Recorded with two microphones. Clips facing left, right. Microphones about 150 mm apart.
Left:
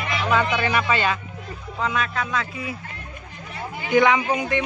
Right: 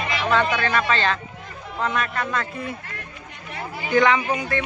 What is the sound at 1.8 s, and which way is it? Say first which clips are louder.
Speech: even; centre (ahead or behind).